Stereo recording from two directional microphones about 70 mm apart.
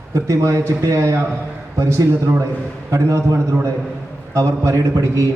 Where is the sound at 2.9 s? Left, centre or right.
Right.